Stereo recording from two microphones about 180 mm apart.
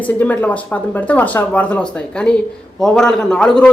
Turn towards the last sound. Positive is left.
turn(degrees=5)  # may be behind; listen again after turning